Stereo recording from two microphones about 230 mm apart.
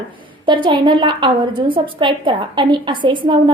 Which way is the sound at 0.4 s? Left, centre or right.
Right.